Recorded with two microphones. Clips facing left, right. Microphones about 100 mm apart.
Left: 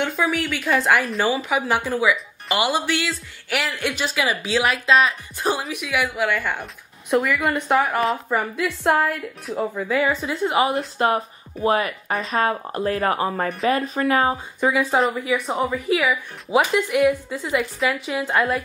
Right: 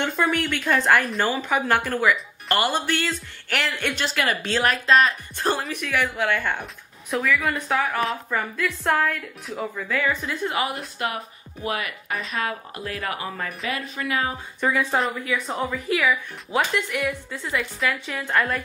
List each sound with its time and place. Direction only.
0.0 s a woman's voice: centre (ahead or behind)
7.4 s a woman's voice: 20° left (ahead or behind); by 14.4 s 40° left (ahead or behind)
14.6 s speech: 10° left (ahead or behind)
15.1 s a woman's voice: 20° left (ahead or behind)